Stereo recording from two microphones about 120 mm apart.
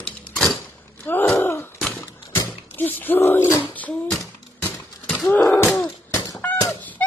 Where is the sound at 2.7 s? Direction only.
15° left (ahead or behind).